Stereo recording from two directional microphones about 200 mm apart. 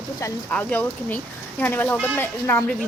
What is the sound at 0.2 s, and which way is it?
Speech, 10° left (ahead or behind).